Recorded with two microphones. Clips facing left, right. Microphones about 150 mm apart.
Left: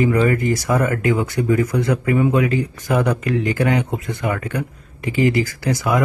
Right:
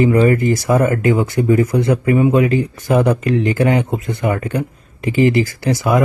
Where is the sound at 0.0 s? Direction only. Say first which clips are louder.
Right 4 dB; 30° right (ahead or behind).